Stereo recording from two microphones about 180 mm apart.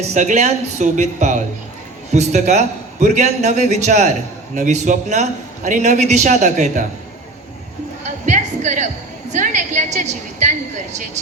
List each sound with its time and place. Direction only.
0.0 s a man's voice: 40° right (ahead or behind)
8.0 s music: 40° right (ahead or behind)
9.3 s a woman's voice: 40° right (ahead or behind)